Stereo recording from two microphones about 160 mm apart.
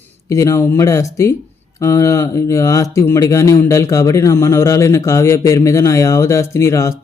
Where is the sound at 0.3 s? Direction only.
20° left (ahead or behind).